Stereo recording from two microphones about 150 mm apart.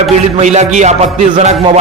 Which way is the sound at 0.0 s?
45° right (ahead or behind).